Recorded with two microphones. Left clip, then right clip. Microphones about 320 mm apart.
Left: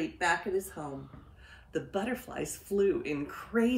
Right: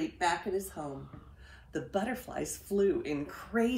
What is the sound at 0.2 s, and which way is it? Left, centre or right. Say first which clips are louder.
A woman's voice: left 2 dB; centre.